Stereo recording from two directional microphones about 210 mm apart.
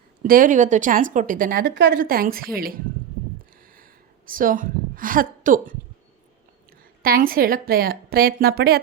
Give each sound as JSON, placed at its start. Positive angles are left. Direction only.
{"t": 0.2, "sound": "speech", "side_deg": -40}
{"t": 1.7, "sound": "a woman's voice", "side_deg": -60}
{"t": 2.0, "sound": "a woman's voice", "side_deg": -45}
{"t": 3.6, "sound": "a sound", "side_deg": -40}
{"t": 6.7, "sound": "a woman's voice", "side_deg": -45}